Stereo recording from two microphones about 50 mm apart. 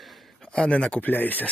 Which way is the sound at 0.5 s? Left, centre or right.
Left.